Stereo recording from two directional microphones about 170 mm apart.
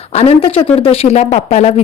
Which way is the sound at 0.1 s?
35° left (ahead or behind).